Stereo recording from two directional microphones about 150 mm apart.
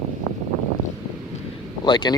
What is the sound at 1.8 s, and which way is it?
Speech, 30° left (ahead or behind).